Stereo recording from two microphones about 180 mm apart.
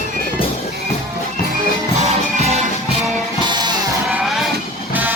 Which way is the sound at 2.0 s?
35° right (ahead or behind).